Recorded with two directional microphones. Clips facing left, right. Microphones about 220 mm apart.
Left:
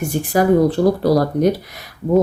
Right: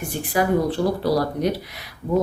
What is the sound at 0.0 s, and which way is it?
Speech, 45° left (ahead or behind).